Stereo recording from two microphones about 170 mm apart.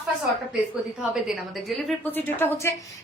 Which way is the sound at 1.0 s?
Centre (ahead or behind).